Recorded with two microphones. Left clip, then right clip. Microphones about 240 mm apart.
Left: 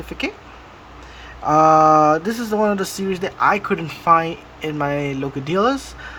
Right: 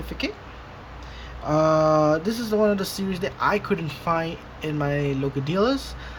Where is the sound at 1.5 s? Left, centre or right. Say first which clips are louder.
Left 7 dB; centre.